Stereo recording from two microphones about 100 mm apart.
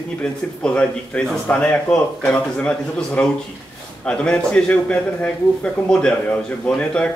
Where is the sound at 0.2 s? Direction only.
10° left (ahead or behind).